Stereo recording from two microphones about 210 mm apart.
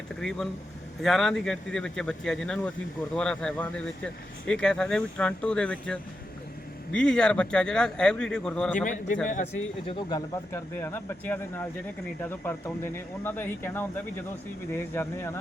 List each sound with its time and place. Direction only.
0.2 s speech: centre (ahead or behind)
9.3 s speech: 30° left (ahead or behind); by 15.4 s 10° left (ahead or behind)